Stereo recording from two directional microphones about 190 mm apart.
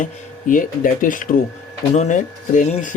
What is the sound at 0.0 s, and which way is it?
Speech, 45° left (ahead or behind).